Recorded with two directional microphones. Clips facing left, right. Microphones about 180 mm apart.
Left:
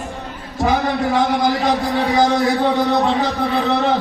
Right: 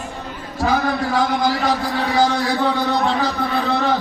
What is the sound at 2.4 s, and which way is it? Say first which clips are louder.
A man's voice: left 3 dB; 25° left (ahead or behind).